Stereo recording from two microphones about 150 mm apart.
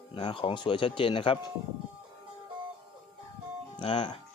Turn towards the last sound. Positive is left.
turn(degrees=35)  # may be behind; listen again after turning